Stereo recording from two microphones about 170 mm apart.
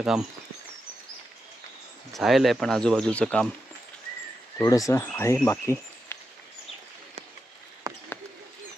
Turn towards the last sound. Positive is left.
turn(degrees=-20)  # may be behind; listen again after turning